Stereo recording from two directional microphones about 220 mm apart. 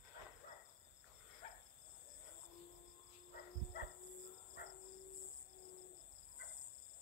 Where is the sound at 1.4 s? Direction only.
30° left (ahead or behind).